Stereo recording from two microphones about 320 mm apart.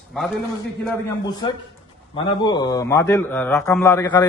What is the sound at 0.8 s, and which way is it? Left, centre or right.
A man's voice, centre.